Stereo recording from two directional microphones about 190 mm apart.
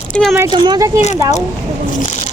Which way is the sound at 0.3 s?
20° right (ahead or behind).